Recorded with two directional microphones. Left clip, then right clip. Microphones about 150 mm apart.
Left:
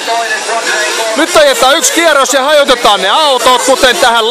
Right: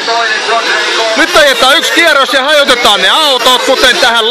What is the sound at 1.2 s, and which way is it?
Speech, 15° left (ahead or behind).